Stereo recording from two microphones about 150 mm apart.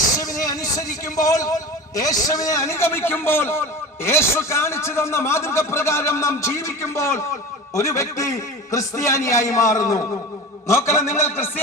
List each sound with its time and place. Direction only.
0.4 s a man's voice: 25° left (ahead or behind)